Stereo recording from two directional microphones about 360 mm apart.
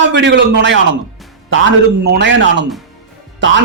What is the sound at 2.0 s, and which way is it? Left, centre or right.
Speech, right.